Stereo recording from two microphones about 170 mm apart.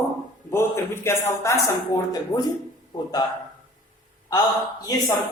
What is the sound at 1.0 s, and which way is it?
Speech, 15° left (ahead or behind).